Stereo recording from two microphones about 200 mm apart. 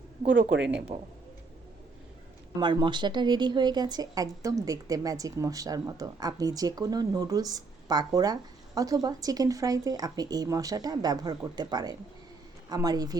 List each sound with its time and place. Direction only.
0.9 s a man's voice: 40° right (ahead or behind)
2.6 s speech: 20° right (ahead or behind)